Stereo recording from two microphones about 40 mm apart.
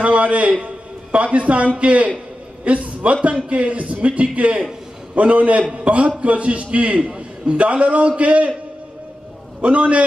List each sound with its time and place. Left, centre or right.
0.0 s a man's voice: right
7.0 s a man's voice: right
9.6 s a man's voice: right